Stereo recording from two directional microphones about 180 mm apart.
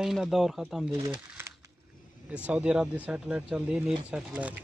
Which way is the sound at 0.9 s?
15° right (ahead or behind).